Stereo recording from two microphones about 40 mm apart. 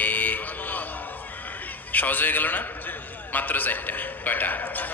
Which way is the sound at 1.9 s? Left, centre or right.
Left.